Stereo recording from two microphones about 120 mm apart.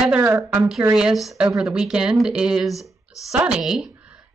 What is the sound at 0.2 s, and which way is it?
Speech, 20° right (ahead or behind).